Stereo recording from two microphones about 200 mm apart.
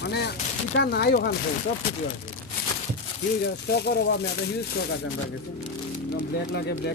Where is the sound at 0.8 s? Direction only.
55° left (ahead or behind).